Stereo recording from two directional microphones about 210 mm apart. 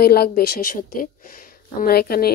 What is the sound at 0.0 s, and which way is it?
Speech, 50° left (ahead or behind).